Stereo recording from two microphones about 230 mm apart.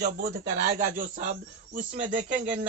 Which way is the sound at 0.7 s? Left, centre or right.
Right.